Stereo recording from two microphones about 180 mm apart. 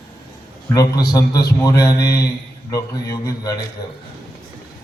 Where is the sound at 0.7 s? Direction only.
20° left (ahead or behind).